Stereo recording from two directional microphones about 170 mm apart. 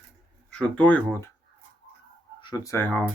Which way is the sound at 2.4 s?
20° left (ahead or behind).